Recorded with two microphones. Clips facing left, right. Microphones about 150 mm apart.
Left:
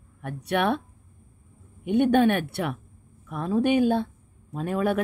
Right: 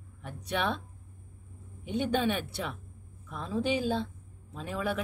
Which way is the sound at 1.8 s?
60° left (ahead or behind).